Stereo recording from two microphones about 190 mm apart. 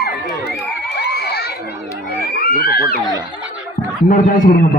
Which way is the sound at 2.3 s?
55° left (ahead or behind).